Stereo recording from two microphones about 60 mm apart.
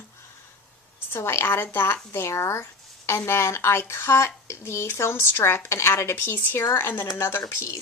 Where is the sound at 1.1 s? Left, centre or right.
Left.